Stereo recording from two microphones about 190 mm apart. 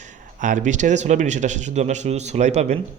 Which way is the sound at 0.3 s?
40° right (ahead or behind).